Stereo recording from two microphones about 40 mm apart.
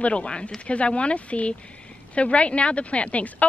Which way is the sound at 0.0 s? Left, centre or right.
Left.